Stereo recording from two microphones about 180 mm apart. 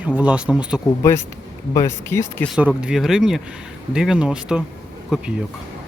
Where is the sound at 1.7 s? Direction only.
15° left (ahead or behind).